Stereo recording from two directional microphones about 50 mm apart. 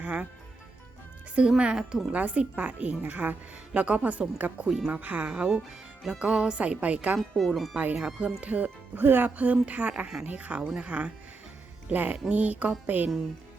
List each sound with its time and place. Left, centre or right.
0.0 s speech: right
1.4 s a woman's voice: centre; by 5.3 s right
5.3 s speech: right
7.2 s speech: centre
7.9 s a woman's voice: right
11.9 s music: right
12.3 s a woman's voice: right